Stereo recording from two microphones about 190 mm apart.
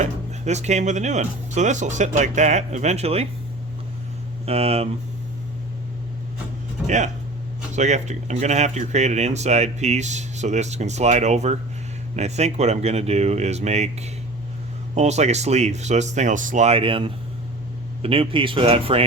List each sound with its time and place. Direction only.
0.0 s speech: 35° right (ahead or behind)
4.4 s speech: 30° right (ahead or behind)
6.8 s speech: 40° right (ahead or behind)